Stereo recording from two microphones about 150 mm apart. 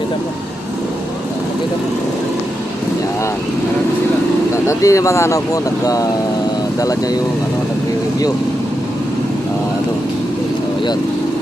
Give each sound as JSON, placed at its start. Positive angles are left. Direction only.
{"t": 4.5, "sound": "speech", "side_deg": 20}